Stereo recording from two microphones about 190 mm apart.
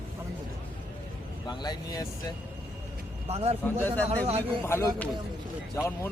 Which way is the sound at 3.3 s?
35° right (ahead or behind).